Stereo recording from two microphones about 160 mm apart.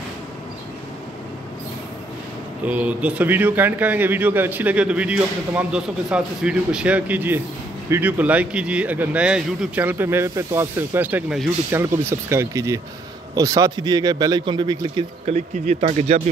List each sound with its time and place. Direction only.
2.6 s a man's voice: 10° right (ahead or behind); by 15.0 s 25° right (ahead or behind)
15.2 s speech: 45° right (ahead or behind)